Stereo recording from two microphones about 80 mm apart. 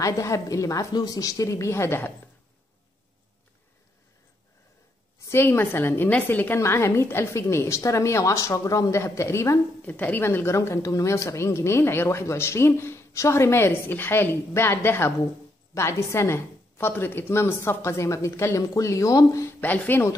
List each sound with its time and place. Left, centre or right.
0.0 s speech: left
5.3 s a woman's voice: left
9.8 s a woman's voice: centre; by 19.5 s left
19.6 s a woman's voice: left